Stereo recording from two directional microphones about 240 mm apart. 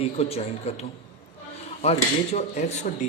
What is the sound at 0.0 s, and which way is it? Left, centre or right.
Speech, left.